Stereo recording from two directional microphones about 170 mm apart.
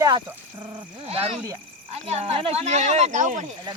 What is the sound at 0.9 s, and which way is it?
A child's voice, 35° right (ahead or behind).